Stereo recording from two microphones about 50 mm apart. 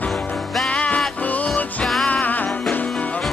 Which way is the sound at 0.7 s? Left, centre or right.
Left.